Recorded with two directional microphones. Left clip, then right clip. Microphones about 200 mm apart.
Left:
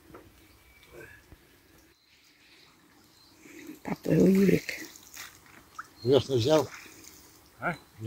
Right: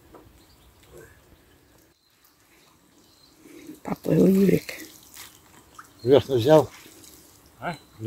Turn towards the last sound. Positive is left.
turn(degrees=-10)  # may be behind; listen again after turning